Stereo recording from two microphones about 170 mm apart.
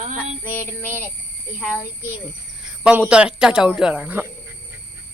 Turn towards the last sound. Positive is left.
turn(degrees=-10)  # may be behind; listen again after turning